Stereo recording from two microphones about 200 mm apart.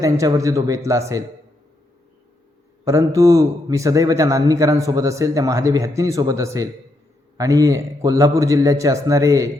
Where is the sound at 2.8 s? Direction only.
15° right (ahead or behind).